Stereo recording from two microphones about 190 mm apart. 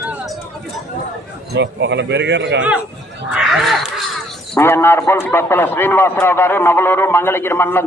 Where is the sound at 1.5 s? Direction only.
70° right (ahead or behind).